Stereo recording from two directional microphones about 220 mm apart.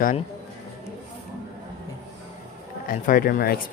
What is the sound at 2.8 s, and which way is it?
Speech, 40° left (ahead or behind).